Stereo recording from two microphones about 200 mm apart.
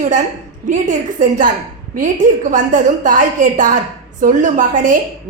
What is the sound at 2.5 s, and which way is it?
A woman's voice, 40° right (ahead or behind).